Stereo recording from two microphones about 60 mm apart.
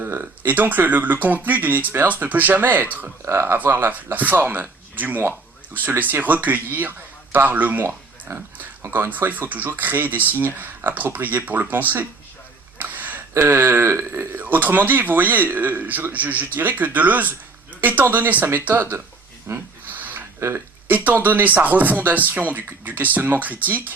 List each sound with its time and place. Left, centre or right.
0.0 s speech: right
3.2 s speech: right
12.8 s a sound: right
13.3 s speech: right
14.3 s speech: right
19.5 s speech: right
19.9 s a sound: right
20.8 s speech: right